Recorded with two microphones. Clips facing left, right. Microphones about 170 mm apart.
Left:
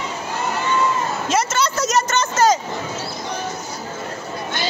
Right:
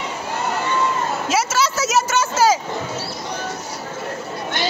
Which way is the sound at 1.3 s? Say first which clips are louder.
Even; 5° right (ahead or behind).